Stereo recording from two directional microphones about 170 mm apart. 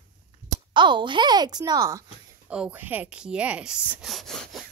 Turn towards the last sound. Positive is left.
turn(degrees=0)  # may be behind; listen again after turning